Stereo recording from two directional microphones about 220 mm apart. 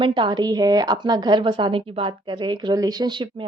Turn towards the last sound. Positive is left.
turn(degrees=-20)  # may be behind; listen again after turning